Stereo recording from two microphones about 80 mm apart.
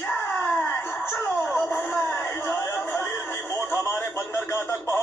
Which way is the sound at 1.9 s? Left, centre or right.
Left.